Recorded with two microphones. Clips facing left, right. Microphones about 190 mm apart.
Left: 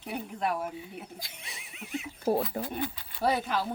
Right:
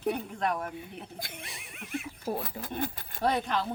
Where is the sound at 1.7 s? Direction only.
55° right (ahead or behind).